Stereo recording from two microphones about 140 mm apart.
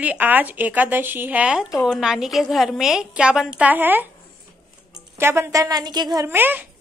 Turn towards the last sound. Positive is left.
turn(degrees=-15)  # may be behind; listen again after turning